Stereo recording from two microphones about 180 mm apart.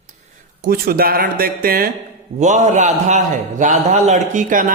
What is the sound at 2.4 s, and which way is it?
A man's voice, 40° right (ahead or behind).